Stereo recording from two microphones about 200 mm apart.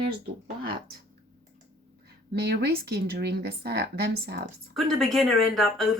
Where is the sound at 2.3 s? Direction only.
55° right (ahead or behind).